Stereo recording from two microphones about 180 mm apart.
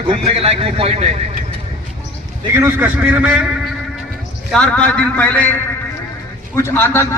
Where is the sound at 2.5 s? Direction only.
10° right (ahead or behind).